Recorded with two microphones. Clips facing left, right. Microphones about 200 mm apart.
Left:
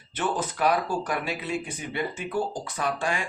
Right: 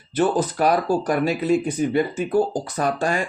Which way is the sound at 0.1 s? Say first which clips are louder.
Right 9 dB; 35° right (ahead or behind).